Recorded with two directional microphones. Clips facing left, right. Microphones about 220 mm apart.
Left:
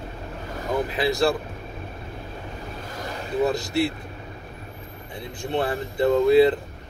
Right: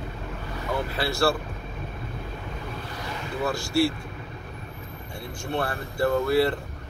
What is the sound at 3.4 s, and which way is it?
Speech, 20° left (ahead or behind).